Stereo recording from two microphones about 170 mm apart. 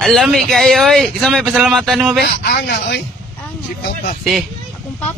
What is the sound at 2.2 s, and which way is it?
Speech, 75° left (ahead or behind).